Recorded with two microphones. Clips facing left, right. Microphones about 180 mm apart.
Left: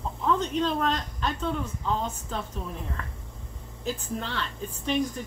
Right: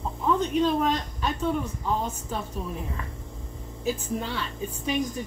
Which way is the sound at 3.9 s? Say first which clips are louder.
Right 3 dB; 10° right (ahead or behind).